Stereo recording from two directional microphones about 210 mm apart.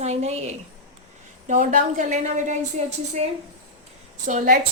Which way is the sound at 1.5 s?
35° right (ahead or behind).